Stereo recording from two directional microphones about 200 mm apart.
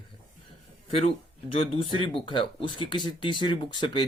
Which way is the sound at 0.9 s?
30° left (ahead or behind).